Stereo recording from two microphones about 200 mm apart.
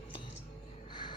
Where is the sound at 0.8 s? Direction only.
20° left (ahead or behind).